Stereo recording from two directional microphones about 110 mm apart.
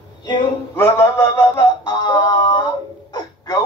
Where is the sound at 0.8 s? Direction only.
25° left (ahead or behind).